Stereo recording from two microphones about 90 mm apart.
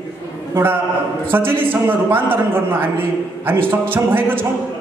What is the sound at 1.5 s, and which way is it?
A man's voice, 25° right (ahead or behind).